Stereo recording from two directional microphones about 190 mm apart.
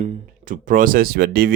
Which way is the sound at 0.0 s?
40° right (ahead or behind).